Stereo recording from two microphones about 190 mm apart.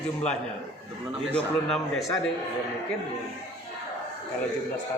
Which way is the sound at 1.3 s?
Centre (ahead or behind).